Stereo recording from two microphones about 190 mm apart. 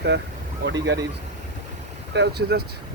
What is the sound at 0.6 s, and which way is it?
Speech, 65° right (ahead or behind).